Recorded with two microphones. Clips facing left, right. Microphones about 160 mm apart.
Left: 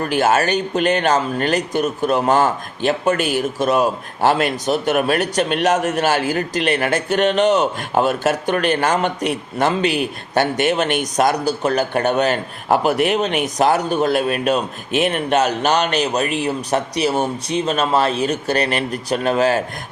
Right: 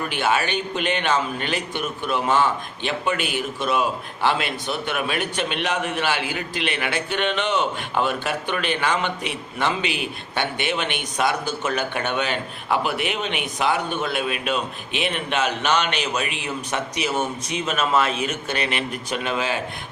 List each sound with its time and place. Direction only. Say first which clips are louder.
0.0 s a man's voice: left 6 dB; 45° left (ahead or behind)